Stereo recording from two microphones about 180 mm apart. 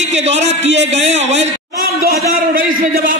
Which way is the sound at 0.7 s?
90° right.